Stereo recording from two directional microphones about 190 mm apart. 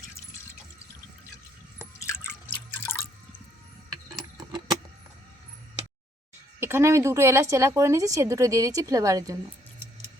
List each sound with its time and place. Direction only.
2.0 s drip: 15° left (ahead or behind)
6.6 s a woman's voice: 15° right (ahead or behind)